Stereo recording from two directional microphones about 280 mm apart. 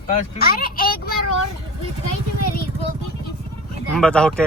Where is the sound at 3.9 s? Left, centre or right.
Centre.